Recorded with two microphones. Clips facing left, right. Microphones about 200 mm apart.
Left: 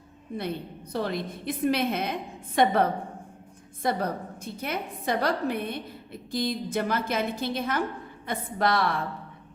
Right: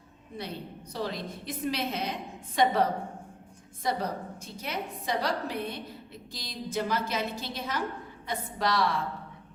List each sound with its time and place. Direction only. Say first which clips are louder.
0.9 s a woman's voice: left 4 dB; 55° left (ahead or behind)